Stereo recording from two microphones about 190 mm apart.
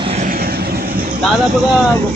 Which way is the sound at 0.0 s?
35° right (ahead or behind).